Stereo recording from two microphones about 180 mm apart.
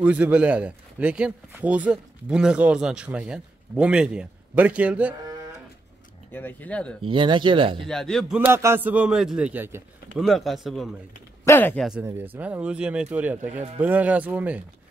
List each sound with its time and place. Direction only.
0.0 s speech: 10° right (ahead or behind)
6.3 s speech: 10° left (ahead or behind)
7.0 s speech: 30° right (ahead or behind)
7.8 s speech: centre (ahead or behind)
8.4 s speech: 15° right (ahead or behind)
10.1 s speech: centre (ahead or behind)
11.4 s speech: 10° left (ahead or behind)
12.0 s speech: 15° right (ahead or behind)